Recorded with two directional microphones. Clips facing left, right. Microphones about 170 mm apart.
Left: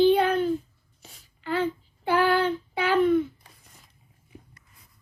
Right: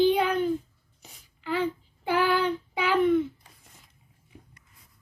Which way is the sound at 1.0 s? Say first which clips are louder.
Left 1 dB; 10° right (ahead or behind).